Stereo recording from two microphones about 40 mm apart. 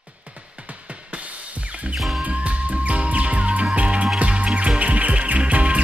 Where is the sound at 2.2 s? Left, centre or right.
Right.